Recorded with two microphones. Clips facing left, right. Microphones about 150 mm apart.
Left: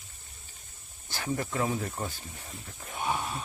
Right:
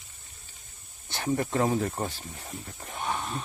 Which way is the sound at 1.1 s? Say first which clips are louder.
Right 4 dB; 30° right (ahead or behind).